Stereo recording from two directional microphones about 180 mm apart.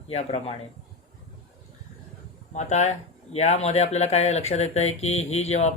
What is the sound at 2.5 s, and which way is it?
Speech, 40° left (ahead or behind).